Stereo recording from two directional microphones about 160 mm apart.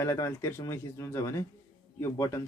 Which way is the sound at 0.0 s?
20° left (ahead or behind).